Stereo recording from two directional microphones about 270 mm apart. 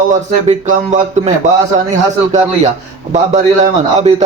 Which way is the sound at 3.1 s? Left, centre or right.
Right.